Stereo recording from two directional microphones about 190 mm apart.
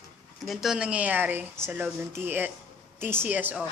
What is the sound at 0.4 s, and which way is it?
Speech, centre (ahead or behind).